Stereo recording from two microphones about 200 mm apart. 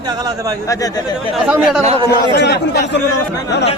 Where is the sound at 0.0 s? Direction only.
20° right (ahead or behind).